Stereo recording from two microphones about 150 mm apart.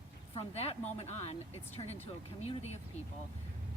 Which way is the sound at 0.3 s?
45° left (ahead or behind).